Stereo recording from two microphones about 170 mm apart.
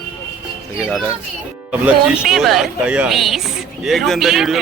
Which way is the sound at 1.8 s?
Centre (ahead or behind).